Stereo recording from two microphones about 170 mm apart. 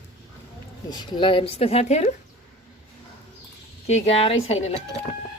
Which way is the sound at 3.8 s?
35° left (ahead or behind).